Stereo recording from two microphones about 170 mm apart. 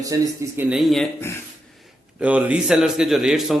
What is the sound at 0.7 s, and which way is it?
Speech, centre (ahead or behind).